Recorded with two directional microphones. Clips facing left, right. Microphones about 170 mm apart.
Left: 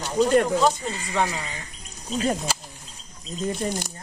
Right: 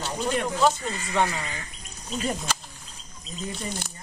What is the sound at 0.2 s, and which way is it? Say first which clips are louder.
Speech: left 9 dB; 45° left (ahead or behind).